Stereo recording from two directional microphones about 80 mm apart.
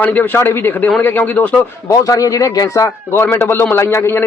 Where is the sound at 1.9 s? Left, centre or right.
Left.